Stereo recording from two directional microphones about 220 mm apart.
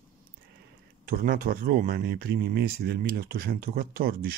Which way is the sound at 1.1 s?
40° right (ahead or behind).